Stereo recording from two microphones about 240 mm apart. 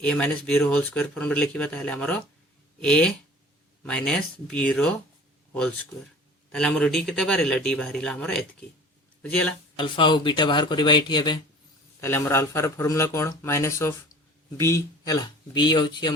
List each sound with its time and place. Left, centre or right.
0.0 s speech: centre
6.5 s speech: centre
9.7 s speech: centre